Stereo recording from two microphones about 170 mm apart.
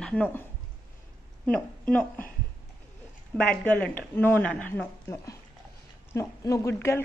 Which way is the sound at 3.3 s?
10° left (ahead or behind).